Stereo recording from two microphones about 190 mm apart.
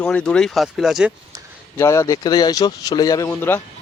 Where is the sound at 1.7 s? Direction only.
15° left (ahead or behind).